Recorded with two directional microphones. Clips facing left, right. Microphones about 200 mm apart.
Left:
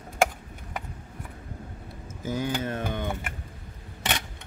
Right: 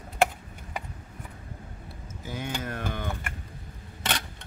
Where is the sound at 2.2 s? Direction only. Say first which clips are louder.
Left 7 dB; 45° left (ahead or behind).